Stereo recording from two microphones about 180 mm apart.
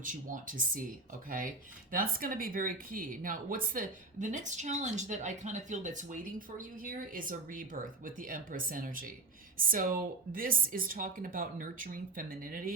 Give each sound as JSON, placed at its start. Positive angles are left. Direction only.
{"t": 0.0, "sound": "speech", "side_deg": -45}
{"t": 1.9, "sound": "speech", "side_deg": -55}